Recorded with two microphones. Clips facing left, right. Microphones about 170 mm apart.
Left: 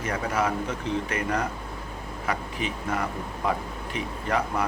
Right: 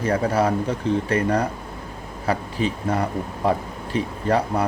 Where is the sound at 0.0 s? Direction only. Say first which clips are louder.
Right 6 dB; 35° right (ahead or behind).